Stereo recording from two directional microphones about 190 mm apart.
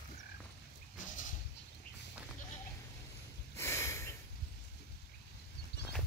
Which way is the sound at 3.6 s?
15° left (ahead or behind).